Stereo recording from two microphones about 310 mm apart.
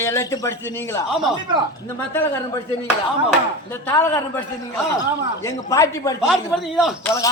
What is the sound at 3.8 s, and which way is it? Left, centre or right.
Speech, centre.